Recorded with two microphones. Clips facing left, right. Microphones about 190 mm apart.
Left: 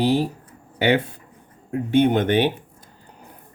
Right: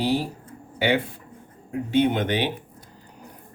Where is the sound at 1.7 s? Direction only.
50° left (ahead or behind).